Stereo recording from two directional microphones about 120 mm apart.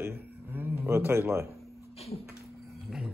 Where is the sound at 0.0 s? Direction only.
20° right (ahead or behind).